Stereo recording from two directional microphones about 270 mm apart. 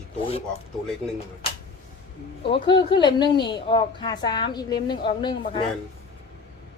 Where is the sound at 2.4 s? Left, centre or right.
Centre.